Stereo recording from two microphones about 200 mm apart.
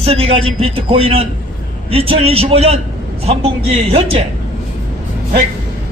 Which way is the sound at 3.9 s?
30° right (ahead or behind).